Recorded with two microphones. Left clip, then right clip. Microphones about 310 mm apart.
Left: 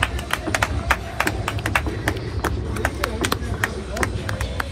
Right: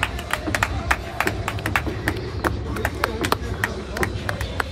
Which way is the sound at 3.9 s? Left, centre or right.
Right.